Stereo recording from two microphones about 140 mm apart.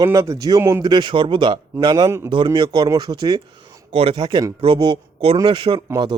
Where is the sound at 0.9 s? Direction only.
35° right (ahead or behind).